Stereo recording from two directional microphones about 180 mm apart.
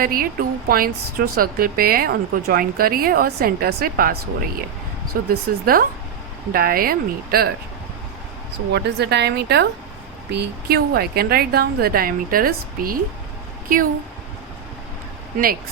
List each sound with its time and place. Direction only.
0.0 s a woman's voice: 55° right (ahead or behind)
8.7 s a woman's voice: 65° right (ahead or behind)